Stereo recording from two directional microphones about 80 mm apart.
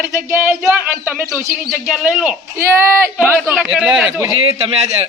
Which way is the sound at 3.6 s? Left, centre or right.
Centre.